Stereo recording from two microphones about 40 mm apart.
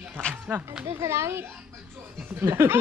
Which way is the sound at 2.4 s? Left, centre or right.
Right.